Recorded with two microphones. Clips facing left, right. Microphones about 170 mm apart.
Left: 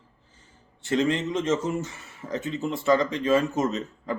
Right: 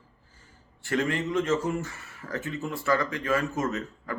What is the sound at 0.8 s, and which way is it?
Speech, 20° left (ahead or behind).